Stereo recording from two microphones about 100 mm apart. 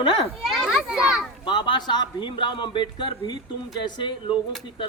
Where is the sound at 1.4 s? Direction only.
50° left (ahead or behind).